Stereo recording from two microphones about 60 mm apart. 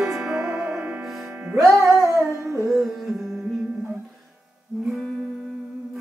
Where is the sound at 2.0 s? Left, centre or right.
Right.